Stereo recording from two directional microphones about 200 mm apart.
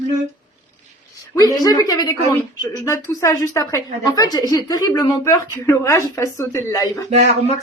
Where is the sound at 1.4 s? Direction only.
20° left (ahead or behind).